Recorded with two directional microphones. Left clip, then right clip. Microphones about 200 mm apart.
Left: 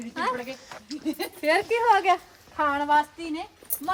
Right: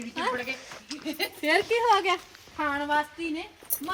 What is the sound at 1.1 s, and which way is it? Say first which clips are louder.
Speech: even; 50° left (ahead or behind).